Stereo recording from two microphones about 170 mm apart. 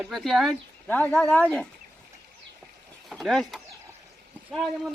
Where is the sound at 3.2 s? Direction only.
Centre (ahead or behind).